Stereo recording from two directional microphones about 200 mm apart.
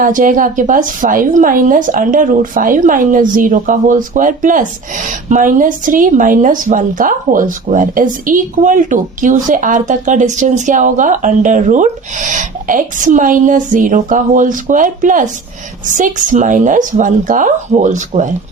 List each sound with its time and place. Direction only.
0.0 s a woman's voice: 40° right (ahead or behind)